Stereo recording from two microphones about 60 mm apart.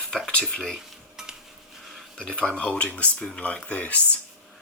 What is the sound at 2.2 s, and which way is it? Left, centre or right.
Speech, centre.